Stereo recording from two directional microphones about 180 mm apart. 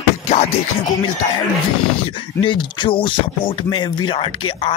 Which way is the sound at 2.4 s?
25° left (ahead or behind).